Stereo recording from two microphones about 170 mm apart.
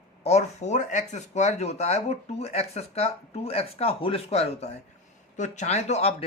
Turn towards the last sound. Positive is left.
turn(degrees=40)  # may be behind; listen again after turning